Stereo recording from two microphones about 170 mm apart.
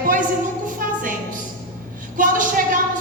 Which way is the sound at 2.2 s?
50° right (ahead or behind).